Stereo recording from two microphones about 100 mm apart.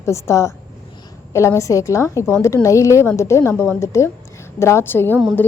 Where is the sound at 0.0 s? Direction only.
30° left (ahead or behind).